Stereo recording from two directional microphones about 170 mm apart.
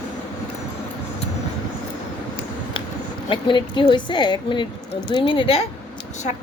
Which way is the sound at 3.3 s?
30° left (ahead or behind).